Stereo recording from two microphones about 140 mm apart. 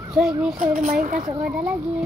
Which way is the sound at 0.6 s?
70° right (ahead or behind).